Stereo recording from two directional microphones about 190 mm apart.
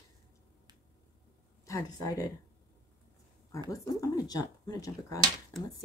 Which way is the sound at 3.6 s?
15° left (ahead or behind).